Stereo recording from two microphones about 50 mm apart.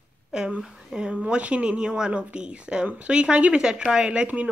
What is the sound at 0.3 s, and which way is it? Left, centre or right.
Speech, centre.